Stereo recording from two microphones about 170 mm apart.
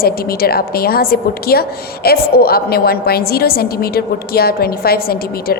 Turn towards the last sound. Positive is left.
turn(degrees=65)  # may be behind; listen again after turning